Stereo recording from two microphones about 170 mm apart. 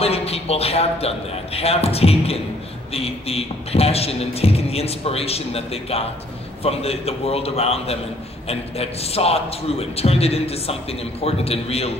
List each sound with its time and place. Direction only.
0.0 s a man's voice: 35° left (ahead or behind)